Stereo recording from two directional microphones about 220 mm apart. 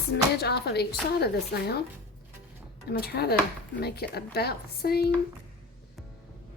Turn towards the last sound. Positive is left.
turn(degrees=45)  # may be behind; listen again after turning